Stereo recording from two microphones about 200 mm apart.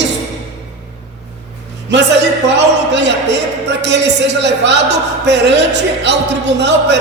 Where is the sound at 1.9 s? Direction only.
60° right (ahead or behind).